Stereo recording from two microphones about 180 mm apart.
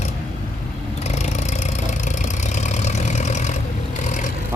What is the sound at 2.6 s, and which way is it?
Vehicle, 40° left (ahead or behind).